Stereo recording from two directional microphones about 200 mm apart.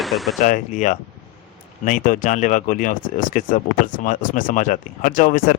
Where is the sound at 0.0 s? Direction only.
Centre (ahead or behind).